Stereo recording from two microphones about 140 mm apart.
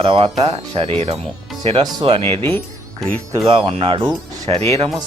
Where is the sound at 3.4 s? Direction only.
40° right (ahead or behind).